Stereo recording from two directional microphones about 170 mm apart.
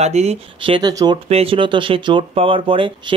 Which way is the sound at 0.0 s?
40° right (ahead or behind).